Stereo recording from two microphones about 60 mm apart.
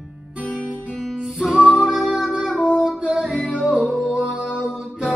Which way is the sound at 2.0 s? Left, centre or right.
Centre.